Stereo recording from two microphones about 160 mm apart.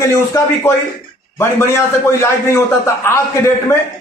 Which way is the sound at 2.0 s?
15° left (ahead or behind).